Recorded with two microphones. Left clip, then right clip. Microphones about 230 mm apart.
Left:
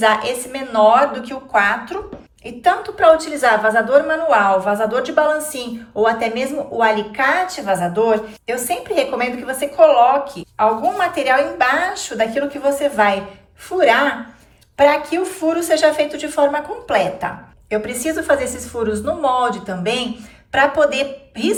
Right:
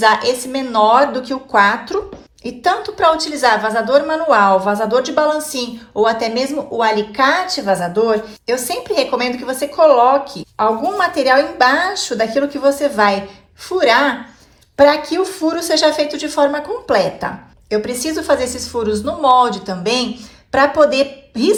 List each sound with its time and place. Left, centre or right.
0.0 s a woman's voice: centre